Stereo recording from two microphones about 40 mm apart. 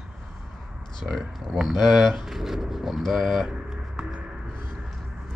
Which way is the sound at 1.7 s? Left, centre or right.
Centre.